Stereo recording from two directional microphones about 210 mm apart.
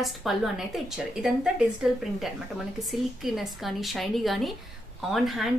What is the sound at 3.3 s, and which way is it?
A woman's voice, centre (ahead or behind).